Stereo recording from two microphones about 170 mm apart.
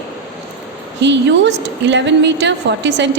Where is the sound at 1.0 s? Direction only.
90° right.